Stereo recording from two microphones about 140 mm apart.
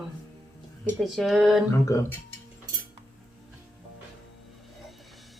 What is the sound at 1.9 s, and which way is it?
Speech, 20° left (ahead or behind).